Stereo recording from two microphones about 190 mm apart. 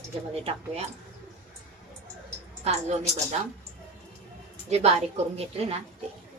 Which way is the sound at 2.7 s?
35° right (ahead or behind).